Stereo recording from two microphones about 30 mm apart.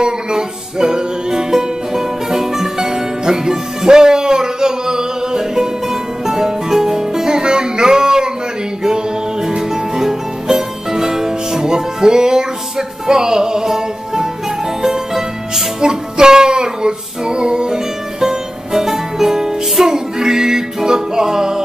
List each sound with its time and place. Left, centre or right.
0.0 s music: right